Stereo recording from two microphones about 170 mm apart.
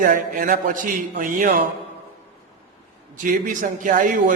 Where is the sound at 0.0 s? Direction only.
50° right (ahead or behind).